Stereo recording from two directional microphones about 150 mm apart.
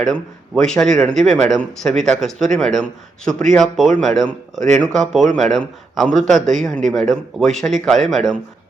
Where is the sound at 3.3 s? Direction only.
60° right (ahead or behind).